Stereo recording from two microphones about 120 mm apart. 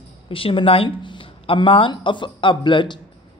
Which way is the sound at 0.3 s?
50° left (ahead or behind).